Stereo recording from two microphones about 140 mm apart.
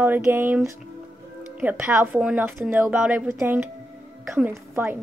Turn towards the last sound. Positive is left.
turn(degrees=-15)  # may be behind; listen again after turning